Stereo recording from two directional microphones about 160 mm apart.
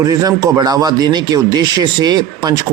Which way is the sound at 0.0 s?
25° right (ahead or behind).